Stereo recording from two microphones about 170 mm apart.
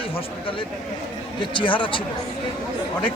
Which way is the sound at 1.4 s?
30° left (ahead or behind).